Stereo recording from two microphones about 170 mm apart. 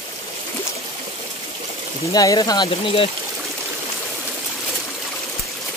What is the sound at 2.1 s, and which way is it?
Speech, 20° left (ahead or behind).